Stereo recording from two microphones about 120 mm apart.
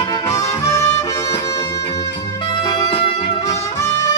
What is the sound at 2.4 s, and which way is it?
Brass instrument, 45° left (ahead or behind).